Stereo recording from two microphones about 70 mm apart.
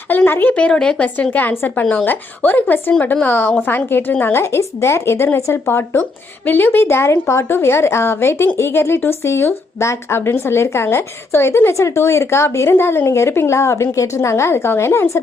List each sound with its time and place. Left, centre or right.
0.3 s a woman's voice: left